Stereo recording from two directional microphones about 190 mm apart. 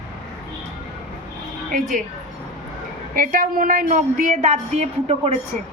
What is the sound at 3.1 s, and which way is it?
A woman's voice, 45° right (ahead or behind).